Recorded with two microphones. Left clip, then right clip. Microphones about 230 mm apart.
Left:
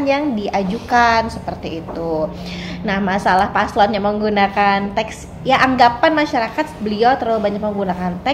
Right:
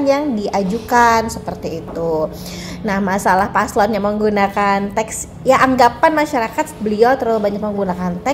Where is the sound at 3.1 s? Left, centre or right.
Right.